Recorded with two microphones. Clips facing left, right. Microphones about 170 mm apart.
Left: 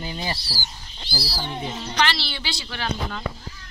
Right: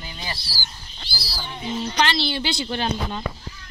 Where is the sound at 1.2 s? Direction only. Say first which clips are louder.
Left 4 dB; 30° left (ahead or behind).